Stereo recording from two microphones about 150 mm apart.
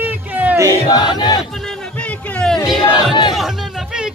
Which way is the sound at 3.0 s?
30° left (ahead or behind).